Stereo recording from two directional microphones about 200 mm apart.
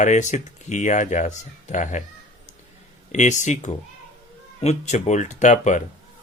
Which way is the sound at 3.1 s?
35° left (ahead or behind).